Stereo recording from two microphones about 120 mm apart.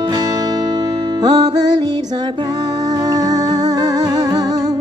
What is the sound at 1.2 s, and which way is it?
Music, 35° right (ahead or behind).